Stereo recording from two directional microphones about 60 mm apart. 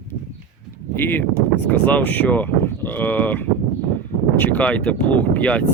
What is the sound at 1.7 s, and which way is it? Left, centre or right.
Speech, left.